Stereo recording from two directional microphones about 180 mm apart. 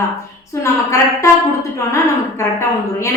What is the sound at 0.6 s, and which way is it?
Speech, 15° left (ahead or behind).